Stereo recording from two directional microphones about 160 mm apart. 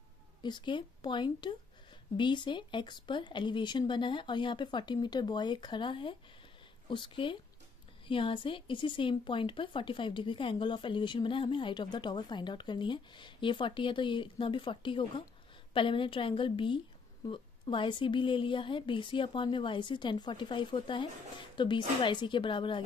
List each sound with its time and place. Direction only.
0.4 s a woman's voice: 30° left (ahead or behind)